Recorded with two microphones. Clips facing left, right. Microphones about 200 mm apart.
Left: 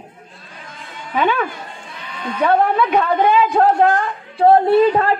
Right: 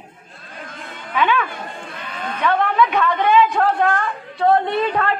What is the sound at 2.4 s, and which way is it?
A woman's voice, 35° left (ahead or behind).